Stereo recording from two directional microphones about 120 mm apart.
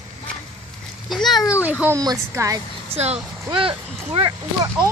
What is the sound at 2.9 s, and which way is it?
Speech, 60° right (ahead or behind).